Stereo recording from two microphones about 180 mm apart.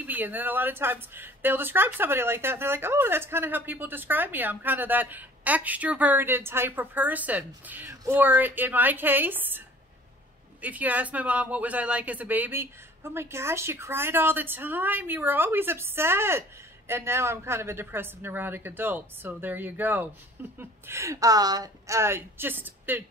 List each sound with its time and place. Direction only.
0.0 s speech: 10° right (ahead or behind)
10.6 s speech: 10° right (ahead or behind)